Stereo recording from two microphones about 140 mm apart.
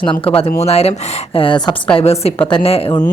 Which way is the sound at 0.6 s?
50° left (ahead or behind).